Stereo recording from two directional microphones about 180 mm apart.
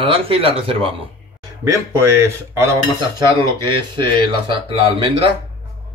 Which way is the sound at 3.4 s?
25° right (ahead or behind).